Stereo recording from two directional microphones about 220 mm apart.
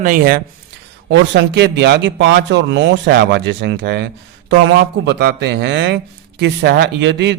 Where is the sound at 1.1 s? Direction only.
50° right (ahead or behind).